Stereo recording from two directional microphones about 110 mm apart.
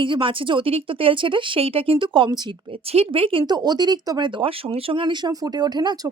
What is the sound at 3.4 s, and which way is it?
Speech, 40° right (ahead or behind).